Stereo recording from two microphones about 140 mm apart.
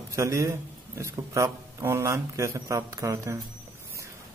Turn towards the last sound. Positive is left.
turn(degrees=-20)  # may be behind; listen again after turning